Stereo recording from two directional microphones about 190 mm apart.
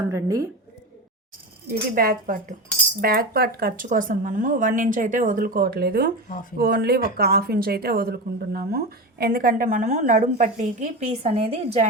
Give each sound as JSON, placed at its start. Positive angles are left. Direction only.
{"t": 0.1, "sound": "a woman's voice", "side_deg": -15}
{"t": 2.0, "sound": "a woman's voice", "side_deg": -50}